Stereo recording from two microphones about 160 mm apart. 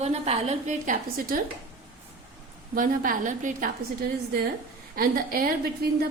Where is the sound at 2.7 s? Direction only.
55° right (ahead or behind).